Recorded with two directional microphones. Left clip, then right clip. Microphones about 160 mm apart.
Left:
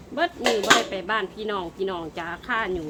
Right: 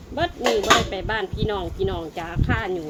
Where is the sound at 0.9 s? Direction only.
5° left (ahead or behind).